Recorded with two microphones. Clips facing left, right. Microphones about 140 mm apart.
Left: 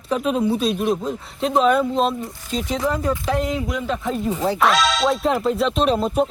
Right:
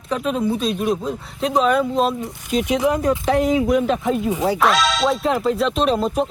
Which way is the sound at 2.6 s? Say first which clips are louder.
Right 4 dB; 15° right (ahead or behind).